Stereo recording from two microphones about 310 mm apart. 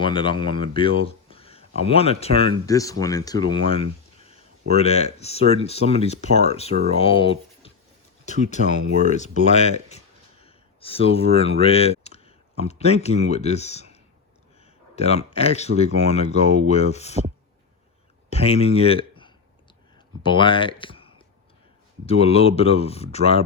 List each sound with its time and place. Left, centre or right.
0.0 s speech: centre
18.3 s speech: centre